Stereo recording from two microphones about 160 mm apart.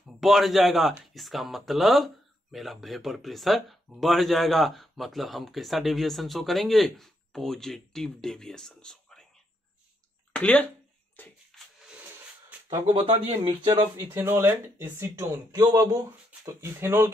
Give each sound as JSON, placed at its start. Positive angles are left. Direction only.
{"t": 0.0, "sound": "speech", "side_deg": 0}
{"t": 10.3, "sound": "speech", "side_deg": 10}
{"t": 11.2, "sound": "a sound", "side_deg": 10}
{"t": 12.5, "sound": "a sound", "side_deg": -10}
{"t": 12.9, "sound": "speech", "side_deg": -35}
{"t": 13.9, "sound": "speech", "side_deg": -15}